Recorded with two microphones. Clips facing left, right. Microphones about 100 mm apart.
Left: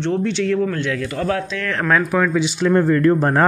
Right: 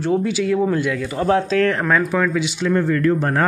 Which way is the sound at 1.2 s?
30° right (ahead or behind).